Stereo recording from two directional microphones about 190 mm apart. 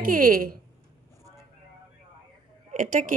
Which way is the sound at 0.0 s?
50° right (ahead or behind).